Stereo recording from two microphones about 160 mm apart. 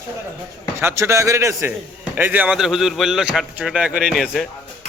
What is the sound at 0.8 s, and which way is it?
A man's voice, 15° right (ahead or behind).